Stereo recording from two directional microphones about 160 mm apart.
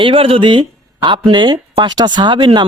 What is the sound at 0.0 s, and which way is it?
Speech, 35° right (ahead or behind).